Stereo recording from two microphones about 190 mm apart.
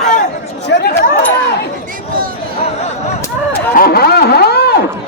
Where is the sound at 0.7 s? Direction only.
55° left (ahead or behind).